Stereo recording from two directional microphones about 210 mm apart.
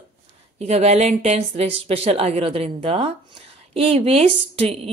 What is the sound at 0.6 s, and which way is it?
A woman's voice, 30° right (ahead or behind).